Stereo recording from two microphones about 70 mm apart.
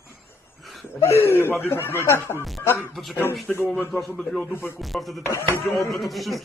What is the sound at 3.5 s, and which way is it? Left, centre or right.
Speech, left.